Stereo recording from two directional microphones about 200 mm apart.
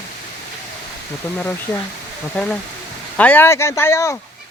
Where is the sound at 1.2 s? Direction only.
10° left (ahead or behind).